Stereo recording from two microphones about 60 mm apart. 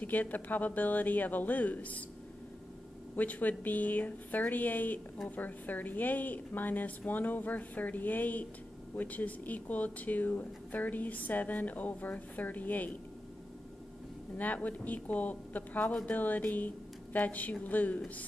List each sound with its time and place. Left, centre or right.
0.0 s speech: left
3.2 s a woman's voice: left
14.3 s a woman's voice: left